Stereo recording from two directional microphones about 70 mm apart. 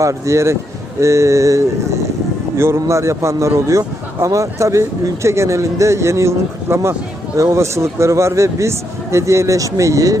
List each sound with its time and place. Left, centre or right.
0.0 s speech: right